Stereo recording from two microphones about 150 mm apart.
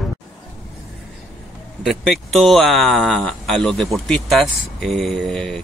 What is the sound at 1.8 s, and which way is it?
Speech, centre (ahead or behind).